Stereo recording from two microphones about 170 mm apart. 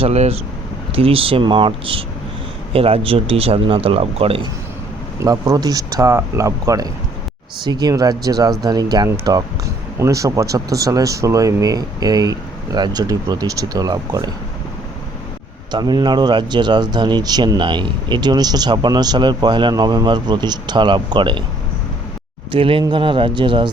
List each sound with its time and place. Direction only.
0.0 s speech: 40° right (ahead or behind)
5.2 s speech: 20° right (ahead or behind)
15.7 s speech: 25° right (ahead or behind)
22.5 s speech: 30° right (ahead or behind)